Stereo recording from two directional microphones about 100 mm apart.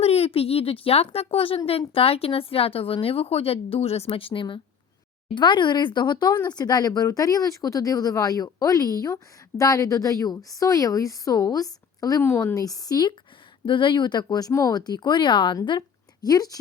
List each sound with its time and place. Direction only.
0.0 s speech: 90° left; by 12.2 s 40° left (ahead or behind)
12.2 s a woman's voice: 20° left (ahead or behind)
12.5 s speech: 35° left (ahead or behind)
13.7 s speech: 55° left (ahead or behind)
16.2 s speech: 40° left (ahead or behind)